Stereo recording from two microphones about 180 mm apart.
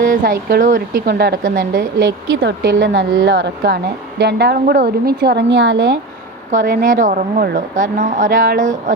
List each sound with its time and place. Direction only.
0.0 s a woman's voice: 50° right (ahead or behind); by 6.0 s 70° right (ahead or behind)
6.5 s a woman's voice: 50° right (ahead or behind)